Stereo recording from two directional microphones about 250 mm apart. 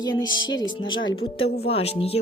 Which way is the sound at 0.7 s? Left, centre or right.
Centre.